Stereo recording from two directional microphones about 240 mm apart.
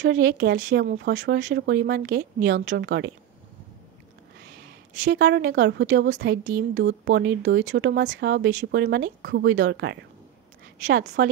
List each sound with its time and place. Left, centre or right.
0.0 s speech: right
5.0 s speech: right